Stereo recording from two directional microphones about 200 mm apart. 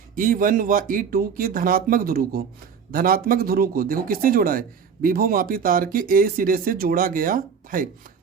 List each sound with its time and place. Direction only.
0.2 s speech: 45° right (ahead or behind)